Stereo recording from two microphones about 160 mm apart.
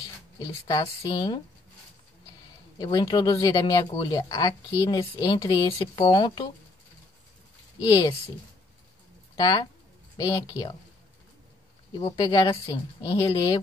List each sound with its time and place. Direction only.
0.7 s speech: 25° left (ahead or behind)
2.8 s speech: 25° left (ahead or behind)
9.3 s speech: 25° left (ahead or behind)
11.9 s speech: 25° left (ahead or behind)